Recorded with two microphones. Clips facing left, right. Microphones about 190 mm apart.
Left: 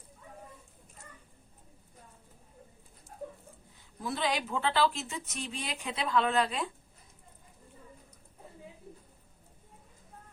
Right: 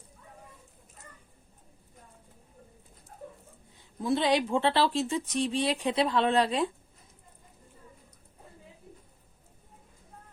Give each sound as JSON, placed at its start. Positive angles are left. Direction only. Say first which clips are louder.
{"t": 4.0, "sound": "speech", "louder": "right 7 dB", "side_deg": -25}